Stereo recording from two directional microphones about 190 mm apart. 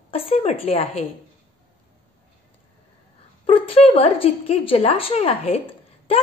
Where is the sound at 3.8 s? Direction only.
30° left (ahead or behind).